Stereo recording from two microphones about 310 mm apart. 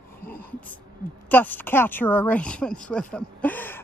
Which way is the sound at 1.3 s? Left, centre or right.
Centre.